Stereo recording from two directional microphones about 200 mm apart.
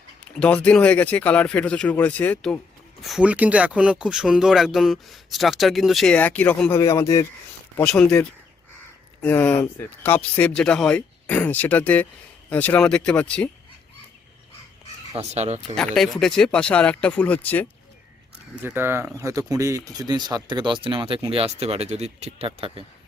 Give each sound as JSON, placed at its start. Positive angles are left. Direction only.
{"t": 0.3, "sound": "speech", "side_deg": 5}
{"t": 3.1, "sound": "speech", "side_deg": -5}
{"t": 15.1, "sound": "speech", "side_deg": -35}
{"t": 16.0, "sound": "speech", "side_deg": 0}
{"t": 18.6, "sound": "speech", "side_deg": -10}